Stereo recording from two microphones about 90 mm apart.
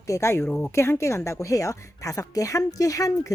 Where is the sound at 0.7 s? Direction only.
30° left (ahead or behind).